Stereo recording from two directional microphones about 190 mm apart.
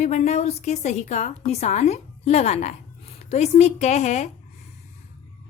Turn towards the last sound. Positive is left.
turn(degrees=35)  # may be behind; listen again after turning